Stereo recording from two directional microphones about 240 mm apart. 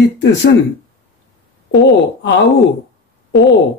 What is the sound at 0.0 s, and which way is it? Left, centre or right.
Speech, left.